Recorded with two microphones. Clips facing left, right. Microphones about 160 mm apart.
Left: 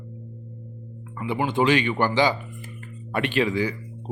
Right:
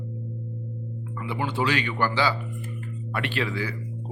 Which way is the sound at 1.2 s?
20° left (ahead or behind).